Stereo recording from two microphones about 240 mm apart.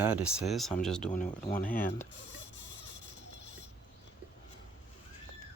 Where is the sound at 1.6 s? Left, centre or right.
Left.